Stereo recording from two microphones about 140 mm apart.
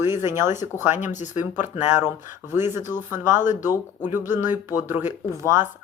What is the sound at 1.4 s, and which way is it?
Speech, 15° right (ahead or behind).